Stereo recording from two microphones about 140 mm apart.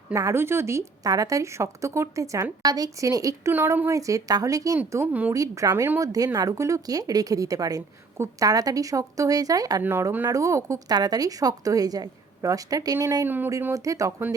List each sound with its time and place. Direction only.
0.1 s speech: 20° right (ahead or behind)
3.5 s a woman's voice: 15° right (ahead or behind)
9.8 s speech: 15° right (ahead or behind)